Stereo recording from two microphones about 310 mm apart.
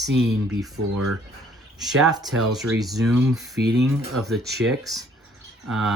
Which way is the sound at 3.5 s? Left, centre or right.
Right.